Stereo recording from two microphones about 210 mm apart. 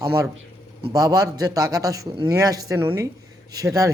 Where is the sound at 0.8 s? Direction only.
15° right (ahead or behind).